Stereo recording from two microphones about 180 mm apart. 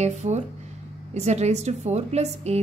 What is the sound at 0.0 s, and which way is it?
A woman's voice, 40° right (ahead or behind).